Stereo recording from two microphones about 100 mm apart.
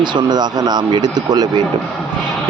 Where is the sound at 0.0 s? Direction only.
45° right (ahead or behind).